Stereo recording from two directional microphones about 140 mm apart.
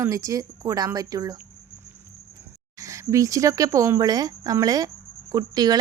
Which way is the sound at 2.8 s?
20° right (ahead or behind).